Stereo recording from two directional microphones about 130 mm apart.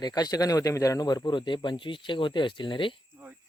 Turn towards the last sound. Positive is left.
turn(degrees=-15)  # may be behind; listen again after turning